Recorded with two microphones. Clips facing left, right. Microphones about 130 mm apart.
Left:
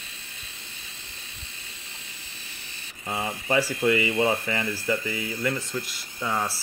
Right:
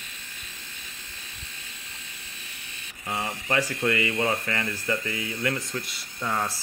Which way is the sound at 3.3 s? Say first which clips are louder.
Left 3 dB; 5° left (ahead or behind).